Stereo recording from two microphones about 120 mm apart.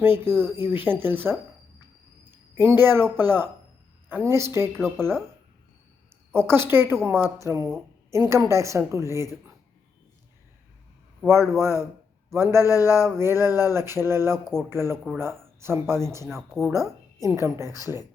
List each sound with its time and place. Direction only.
0.0 s a woman's voice: 20° right (ahead or behind)
6.3 s a woman's voice: 20° right (ahead or behind)
11.4 s a woman's voice: 25° right (ahead or behind)
12.5 s a sound: 30° left (ahead or behind)
13.1 s a woman's voice: 20° right (ahead or behind)
17.7 s speech: 30° left (ahead or behind)